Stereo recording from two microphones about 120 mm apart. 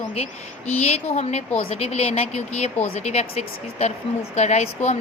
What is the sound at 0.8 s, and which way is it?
Speech, 60° left (ahead or behind).